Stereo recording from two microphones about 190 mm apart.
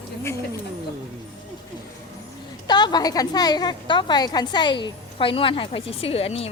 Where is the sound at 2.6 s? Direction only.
25° left (ahead or behind).